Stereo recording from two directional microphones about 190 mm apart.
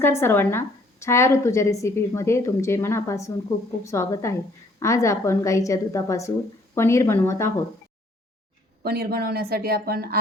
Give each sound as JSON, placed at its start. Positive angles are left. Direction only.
{"t": 0.0, "sound": "a woman's voice", "side_deg": 15}
{"t": 8.8, "sound": "speech", "side_deg": -55}